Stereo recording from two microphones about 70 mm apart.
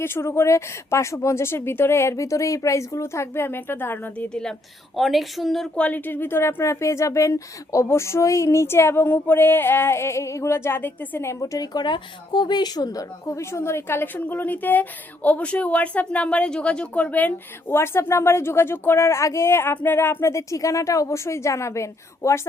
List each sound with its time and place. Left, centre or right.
0.0 s speech: left
4.9 s a woman's voice: centre
5.7 s speech: left
11.3 s speech: left
11.7 s a woman's voice: left
17.7 s speech: left